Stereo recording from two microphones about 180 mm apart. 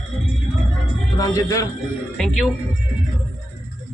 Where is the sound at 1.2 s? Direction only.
20° left (ahead or behind).